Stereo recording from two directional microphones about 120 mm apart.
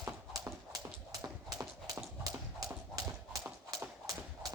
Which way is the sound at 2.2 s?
30° right (ahead or behind).